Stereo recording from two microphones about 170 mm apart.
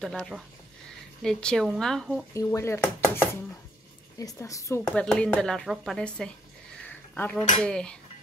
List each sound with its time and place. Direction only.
0.0 s speech: centre (ahead or behind)
2.3 s speech: 15° left (ahead or behind)
6.9 s a sound: 10° left (ahead or behind)
7.6 s speech: 5° left (ahead or behind)